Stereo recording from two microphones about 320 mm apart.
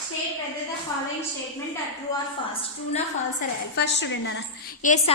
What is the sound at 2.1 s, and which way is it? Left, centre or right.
Speech, centre.